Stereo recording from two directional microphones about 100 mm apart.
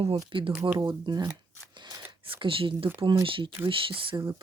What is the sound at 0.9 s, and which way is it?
Speech, 45° right (ahead or behind).